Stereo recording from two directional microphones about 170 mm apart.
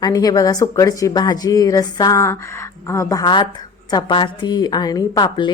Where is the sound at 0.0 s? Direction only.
20° left (ahead or behind).